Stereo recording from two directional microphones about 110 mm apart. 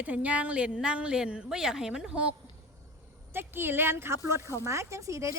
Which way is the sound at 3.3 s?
20° right (ahead or behind).